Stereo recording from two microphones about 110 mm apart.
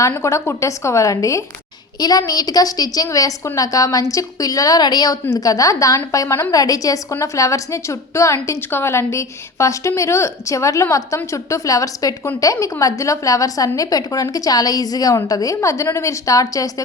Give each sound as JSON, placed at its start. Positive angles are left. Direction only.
{"t": 0.2, "sound": "a woman's voice", "side_deg": 25}